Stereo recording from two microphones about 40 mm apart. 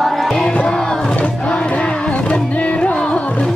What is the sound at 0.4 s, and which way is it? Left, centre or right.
Music, left.